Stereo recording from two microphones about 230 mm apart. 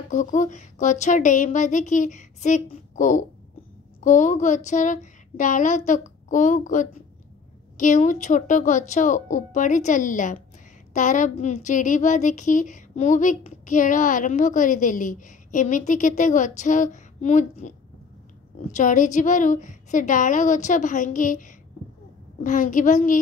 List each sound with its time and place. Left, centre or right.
0.1 s a woman's voice: left